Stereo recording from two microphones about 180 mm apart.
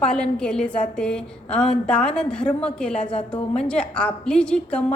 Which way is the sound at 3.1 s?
30° left (ahead or behind).